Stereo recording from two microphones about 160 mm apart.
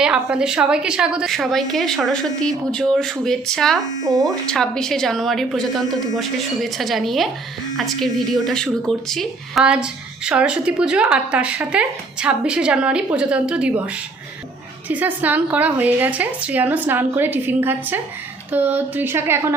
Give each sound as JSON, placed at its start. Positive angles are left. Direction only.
{"t": 0.0, "sound": "a woman's voice", "side_deg": -5}
{"t": 14.8, "sound": "a woman's voice", "side_deg": -10}